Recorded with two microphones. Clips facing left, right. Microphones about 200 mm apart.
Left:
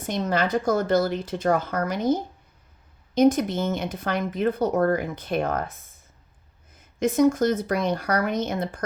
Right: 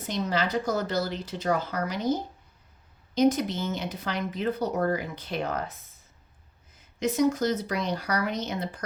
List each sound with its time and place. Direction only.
0.0 s speech: 50° left (ahead or behind)
3.2 s speech: 50° left (ahead or behind)